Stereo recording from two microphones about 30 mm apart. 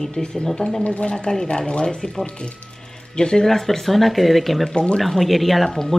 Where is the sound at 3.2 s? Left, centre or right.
Left.